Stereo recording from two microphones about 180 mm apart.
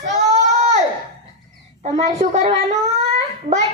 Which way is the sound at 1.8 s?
40° right (ahead or behind).